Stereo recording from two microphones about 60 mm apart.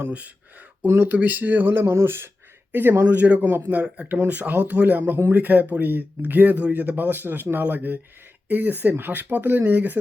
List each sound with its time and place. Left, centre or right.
0.9 s speech: right
1.1 s speech: right
3.2 s a man's voice: right